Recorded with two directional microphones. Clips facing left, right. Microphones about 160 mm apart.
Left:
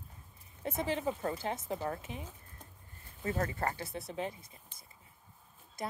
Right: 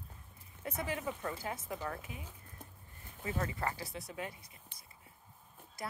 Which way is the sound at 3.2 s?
40° left (ahead or behind).